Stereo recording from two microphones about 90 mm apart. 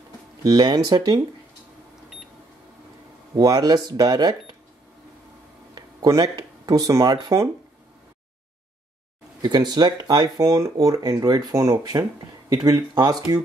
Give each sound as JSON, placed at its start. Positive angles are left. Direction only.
{"t": 0.4, "sound": "speech", "side_deg": -50}
{"t": 3.3, "sound": "speech", "side_deg": -45}
{"t": 5.8, "sound": "speech", "side_deg": -45}
{"t": 9.4, "sound": "speech", "side_deg": -50}